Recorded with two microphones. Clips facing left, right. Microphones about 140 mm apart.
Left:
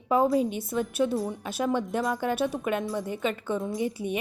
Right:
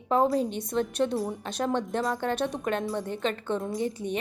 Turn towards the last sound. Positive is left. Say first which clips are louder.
# left 1 dB
turn(degrees=10)  # may be behind; listen again after turning